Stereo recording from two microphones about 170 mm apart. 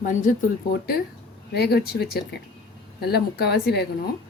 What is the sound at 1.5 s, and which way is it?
Speech, 70° left (ahead or behind).